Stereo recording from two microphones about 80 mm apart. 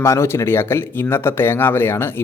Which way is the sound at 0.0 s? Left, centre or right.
Left.